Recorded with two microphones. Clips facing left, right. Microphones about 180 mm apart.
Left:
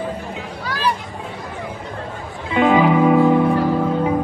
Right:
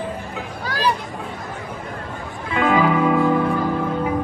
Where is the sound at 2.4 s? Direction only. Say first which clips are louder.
Left 3 dB; 25° left (ahead or behind).